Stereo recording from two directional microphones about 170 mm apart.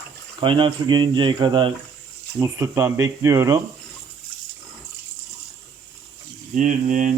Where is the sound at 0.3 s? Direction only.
30° right (ahead or behind).